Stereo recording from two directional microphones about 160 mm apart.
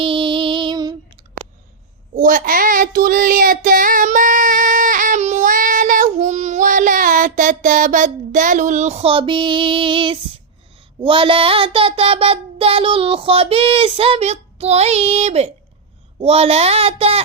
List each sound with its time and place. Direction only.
0.0 s music: 30° right (ahead or behind)
2.1 s child singing: 55° right (ahead or behind); by 17.2 s 40° right (ahead or behind)